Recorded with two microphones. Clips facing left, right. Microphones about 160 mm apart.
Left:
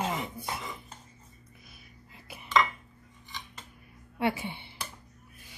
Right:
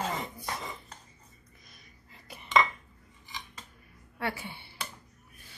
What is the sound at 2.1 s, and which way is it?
Cutlery, 5° left (ahead or behind).